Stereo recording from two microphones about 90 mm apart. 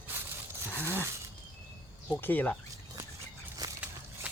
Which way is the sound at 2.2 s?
20° left (ahead or behind).